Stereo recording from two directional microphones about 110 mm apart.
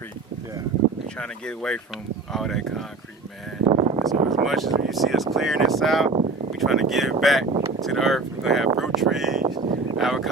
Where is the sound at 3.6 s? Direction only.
60° right (ahead or behind).